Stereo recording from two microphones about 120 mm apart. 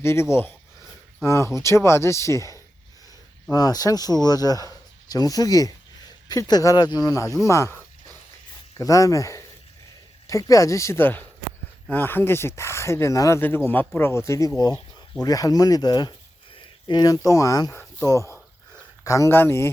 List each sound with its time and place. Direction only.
0.0 s speech: 20° left (ahead or behind)
7.4 s snake: 25° left (ahead or behind)
8.8 s speech: 30° left (ahead or behind)